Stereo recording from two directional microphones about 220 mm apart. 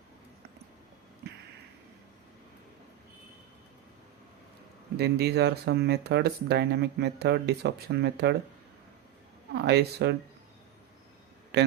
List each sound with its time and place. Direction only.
4.9 s speech: 50° right (ahead or behind)
9.6 s speech: 50° right (ahead or behind)